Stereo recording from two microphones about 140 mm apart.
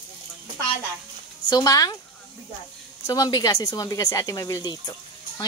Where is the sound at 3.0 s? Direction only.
30° left (ahead or behind).